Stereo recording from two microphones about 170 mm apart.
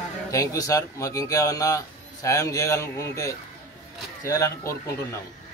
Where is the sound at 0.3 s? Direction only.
20° left (ahead or behind).